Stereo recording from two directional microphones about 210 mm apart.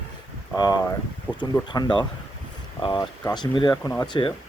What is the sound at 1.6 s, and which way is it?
Speech, 20° left (ahead or behind).